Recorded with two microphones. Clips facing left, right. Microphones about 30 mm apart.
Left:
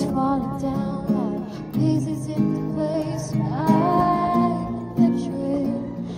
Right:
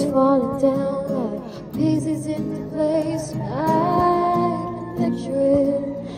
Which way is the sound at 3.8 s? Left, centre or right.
Centre.